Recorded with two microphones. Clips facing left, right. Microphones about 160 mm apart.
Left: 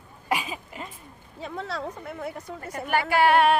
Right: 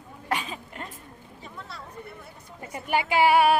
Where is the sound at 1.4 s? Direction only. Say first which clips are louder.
Left 11 dB; 90° left.